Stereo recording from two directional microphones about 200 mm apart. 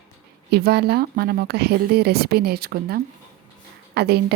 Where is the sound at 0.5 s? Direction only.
55° right (ahead or behind).